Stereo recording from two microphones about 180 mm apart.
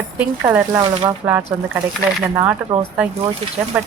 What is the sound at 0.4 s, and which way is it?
A woman's voice, 15° right (ahead or behind).